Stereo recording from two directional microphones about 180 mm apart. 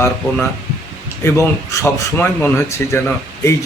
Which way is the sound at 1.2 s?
15° left (ahead or behind).